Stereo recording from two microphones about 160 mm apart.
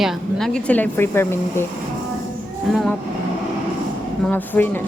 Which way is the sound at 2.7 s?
Centre (ahead or behind).